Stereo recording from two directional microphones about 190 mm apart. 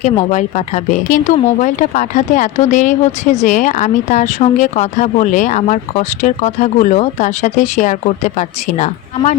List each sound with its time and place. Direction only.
0.0 s speech: 35° left (ahead or behind)